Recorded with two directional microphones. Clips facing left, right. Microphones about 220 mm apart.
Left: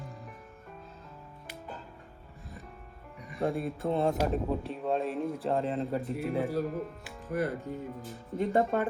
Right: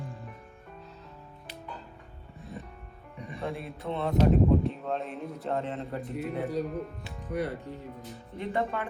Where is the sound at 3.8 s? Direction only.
45° left (ahead or behind).